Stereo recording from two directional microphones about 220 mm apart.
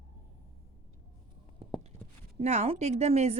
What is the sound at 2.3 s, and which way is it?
Speech, 30° right (ahead or behind).